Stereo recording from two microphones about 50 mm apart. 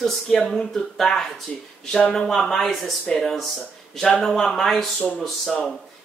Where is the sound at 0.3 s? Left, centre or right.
Centre.